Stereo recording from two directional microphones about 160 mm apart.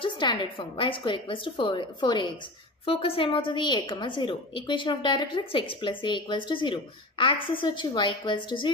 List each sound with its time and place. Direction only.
0.0 s a woman's voice: 30° left (ahead or behind)